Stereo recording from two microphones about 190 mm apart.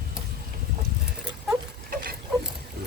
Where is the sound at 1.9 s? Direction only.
50° right (ahead or behind).